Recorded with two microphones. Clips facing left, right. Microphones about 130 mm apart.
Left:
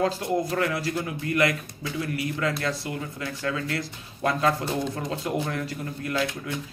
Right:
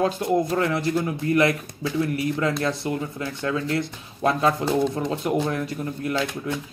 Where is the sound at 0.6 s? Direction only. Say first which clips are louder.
Right 4 dB; 25° right (ahead or behind).